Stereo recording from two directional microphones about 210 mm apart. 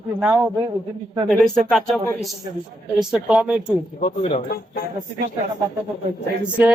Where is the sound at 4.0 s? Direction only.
25° left (ahead or behind).